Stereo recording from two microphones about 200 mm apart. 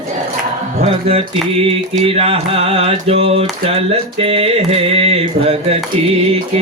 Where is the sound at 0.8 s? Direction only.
30° right (ahead or behind).